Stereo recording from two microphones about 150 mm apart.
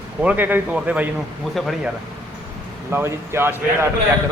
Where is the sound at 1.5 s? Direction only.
Centre (ahead or behind).